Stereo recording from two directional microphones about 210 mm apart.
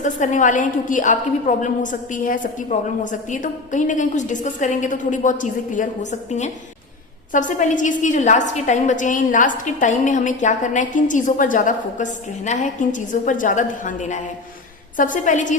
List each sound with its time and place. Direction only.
0.0 s a woman's voice: 35° left (ahead or behind)